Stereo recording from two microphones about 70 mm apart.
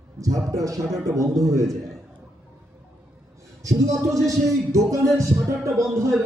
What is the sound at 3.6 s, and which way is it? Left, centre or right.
Speech, right.